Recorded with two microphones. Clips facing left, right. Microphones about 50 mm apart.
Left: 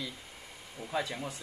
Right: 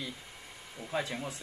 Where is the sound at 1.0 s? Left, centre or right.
Centre.